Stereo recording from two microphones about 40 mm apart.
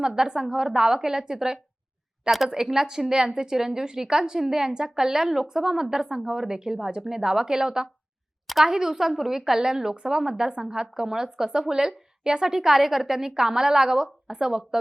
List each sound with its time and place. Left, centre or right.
0.0 s a woman's voice: centre